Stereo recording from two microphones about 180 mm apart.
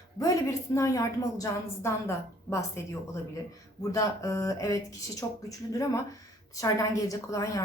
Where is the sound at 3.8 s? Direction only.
20° left (ahead or behind).